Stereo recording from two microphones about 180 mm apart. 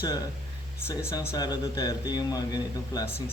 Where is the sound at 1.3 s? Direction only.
20° left (ahead or behind).